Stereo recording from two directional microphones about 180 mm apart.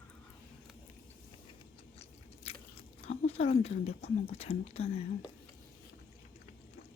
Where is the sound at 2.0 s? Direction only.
35° left (ahead or behind).